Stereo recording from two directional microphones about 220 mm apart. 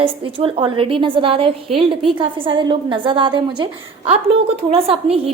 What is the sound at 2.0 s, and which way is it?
A woman's voice, 25° right (ahead or behind).